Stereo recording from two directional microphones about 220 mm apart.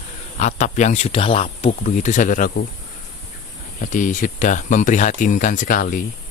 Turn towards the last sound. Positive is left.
turn(degrees=40)  # may be behind; listen again after turning